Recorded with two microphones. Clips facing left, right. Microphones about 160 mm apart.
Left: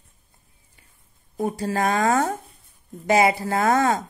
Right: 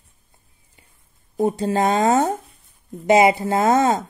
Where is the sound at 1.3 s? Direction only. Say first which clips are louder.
Right 5 dB; 25° right (ahead or behind).